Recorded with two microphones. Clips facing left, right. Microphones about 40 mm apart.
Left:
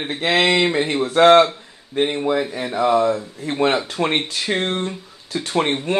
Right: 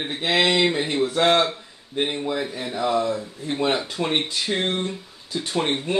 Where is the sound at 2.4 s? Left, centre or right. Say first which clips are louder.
Left 5 dB; left.